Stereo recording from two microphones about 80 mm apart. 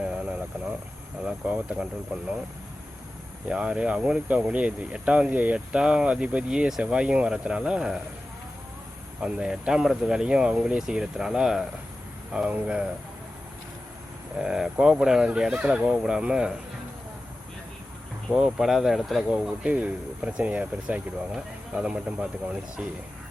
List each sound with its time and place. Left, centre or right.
0.0 s a sound: centre
1.5 s speech: centre
3.5 s speech: centre
9.2 s speech: centre
14.3 s speech: centre
18.3 s speech: centre
19.3 s speech: centre